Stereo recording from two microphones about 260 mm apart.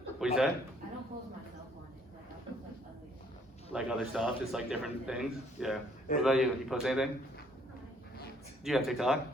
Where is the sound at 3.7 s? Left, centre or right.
Centre.